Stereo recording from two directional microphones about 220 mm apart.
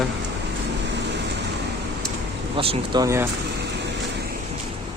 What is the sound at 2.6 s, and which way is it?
Speech, 20° right (ahead or behind).